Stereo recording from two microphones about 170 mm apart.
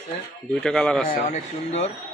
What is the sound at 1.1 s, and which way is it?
Speech, 40° left (ahead or behind).